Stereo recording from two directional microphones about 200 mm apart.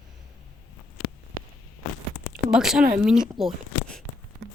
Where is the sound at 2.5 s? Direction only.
5° right (ahead or behind).